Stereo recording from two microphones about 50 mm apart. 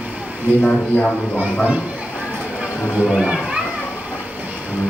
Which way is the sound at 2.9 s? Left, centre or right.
Centre.